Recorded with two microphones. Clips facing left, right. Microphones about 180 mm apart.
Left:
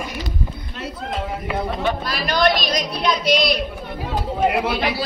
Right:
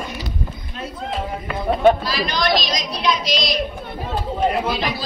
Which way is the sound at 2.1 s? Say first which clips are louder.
Left 2 dB; 55° left (ahead or behind).